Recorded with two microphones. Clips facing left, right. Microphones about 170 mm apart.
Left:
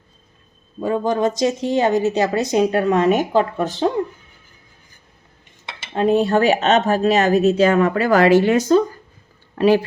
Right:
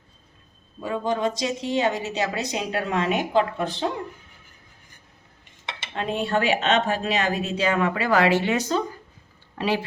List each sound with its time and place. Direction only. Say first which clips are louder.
0.8 s speech: left 6 dB; 45° left (ahead or behind)
5.9 s speech: left 9 dB; 40° left (ahead or behind)